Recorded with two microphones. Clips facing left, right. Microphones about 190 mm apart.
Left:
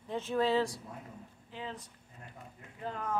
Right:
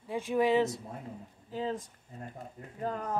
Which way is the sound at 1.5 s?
40° right (ahead or behind).